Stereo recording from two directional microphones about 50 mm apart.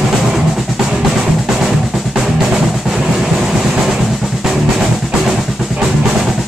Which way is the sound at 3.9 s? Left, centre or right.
Centre.